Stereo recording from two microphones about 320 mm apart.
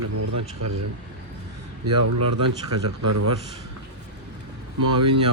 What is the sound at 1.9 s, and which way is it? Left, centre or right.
A man's voice, right.